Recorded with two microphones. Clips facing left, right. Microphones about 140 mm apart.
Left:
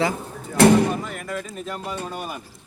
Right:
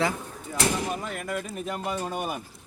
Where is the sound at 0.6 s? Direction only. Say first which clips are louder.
Left 12 dB; 65° left (ahead or behind).